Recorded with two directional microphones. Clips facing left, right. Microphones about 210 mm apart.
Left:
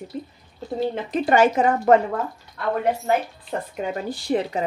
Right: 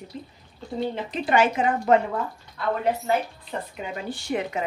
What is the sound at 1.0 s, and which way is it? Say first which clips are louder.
Speech: left 4 dB; 45° left (ahead or behind).